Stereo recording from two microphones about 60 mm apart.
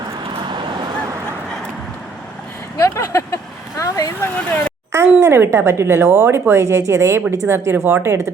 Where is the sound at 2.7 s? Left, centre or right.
Left.